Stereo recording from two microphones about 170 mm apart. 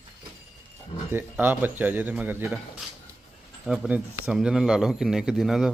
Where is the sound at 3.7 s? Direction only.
5° right (ahead or behind).